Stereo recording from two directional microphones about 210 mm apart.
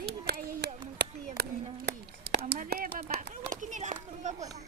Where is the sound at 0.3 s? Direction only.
50° right (ahead or behind).